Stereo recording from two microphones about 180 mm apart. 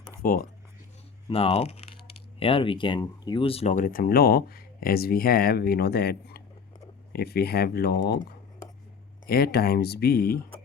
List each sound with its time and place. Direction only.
0.2 s speech: 50° left (ahead or behind)
1.3 s speech: 30° left (ahead or behind); by 8.2 s 60° left (ahead or behind)
9.2 s speech: 55° left (ahead or behind)